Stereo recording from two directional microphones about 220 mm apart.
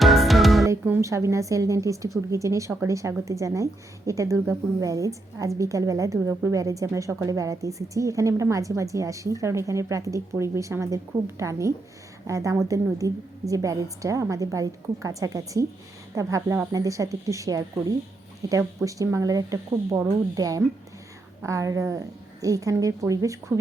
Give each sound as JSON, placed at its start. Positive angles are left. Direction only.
{"t": 0.0, "sound": "music", "side_deg": 0}
{"t": 0.6, "sound": "a woman's voice", "side_deg": -10}